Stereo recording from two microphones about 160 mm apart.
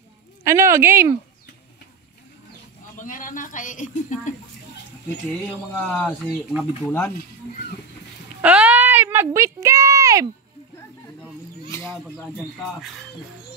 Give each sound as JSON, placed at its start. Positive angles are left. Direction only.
{"t": 0.5, "sound": "speech", "side_deg": -15}
{"t": 3.0, "sound": "speech", "side_deg": 55}
{"t": 5.5, "sound": "speech", "side_deg": 5}
{"t": 8.4, "sound": "speech", "side_deg": -10}
{"t": 12.2, "sound": "speech", "side_deg": 0}